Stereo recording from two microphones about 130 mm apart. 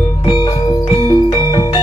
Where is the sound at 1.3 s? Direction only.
35° left (ahead or behind).